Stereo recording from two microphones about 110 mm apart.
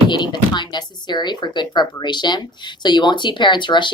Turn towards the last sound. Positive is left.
turn(degrees=45)  # may be behind; listen again after turning